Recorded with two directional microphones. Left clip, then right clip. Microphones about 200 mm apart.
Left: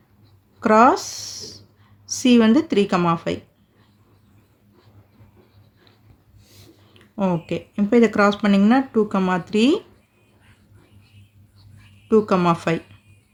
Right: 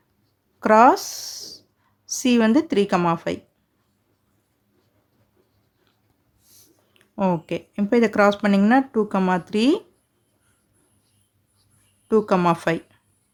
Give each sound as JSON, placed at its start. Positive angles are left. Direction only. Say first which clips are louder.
{"t": 0.6, "sound": "speech", "louder": "even", "side_deg": -30}
{"t": 7.2, "sound": "speech", "louder": "even", "side_deg": -30}
{"t": 12.0, "sound": "speech", "louder": "left 1 dB", "side_deg": -25}